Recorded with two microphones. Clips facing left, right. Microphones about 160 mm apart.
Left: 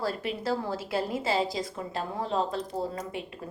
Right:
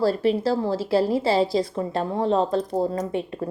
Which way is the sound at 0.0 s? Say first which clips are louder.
Right 10 dB; 35° right (ahead or behind).